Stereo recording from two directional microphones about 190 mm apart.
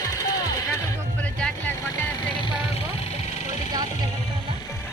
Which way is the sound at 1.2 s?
5° left (ahead or behind).